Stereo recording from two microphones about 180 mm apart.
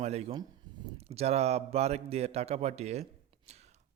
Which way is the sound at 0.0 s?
35° right (ahead or behind).